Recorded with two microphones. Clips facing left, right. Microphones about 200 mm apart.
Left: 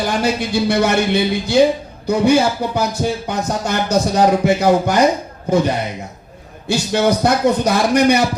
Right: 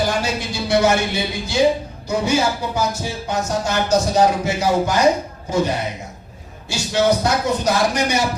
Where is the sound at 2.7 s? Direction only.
60° left (ahead or behind).